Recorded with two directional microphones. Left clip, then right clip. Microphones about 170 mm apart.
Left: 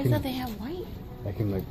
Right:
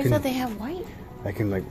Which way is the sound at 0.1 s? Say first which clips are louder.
Right 6 dB; 55° right (ahead or behind).